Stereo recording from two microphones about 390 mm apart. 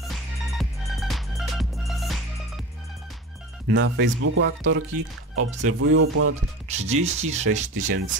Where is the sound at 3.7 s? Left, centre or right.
Right.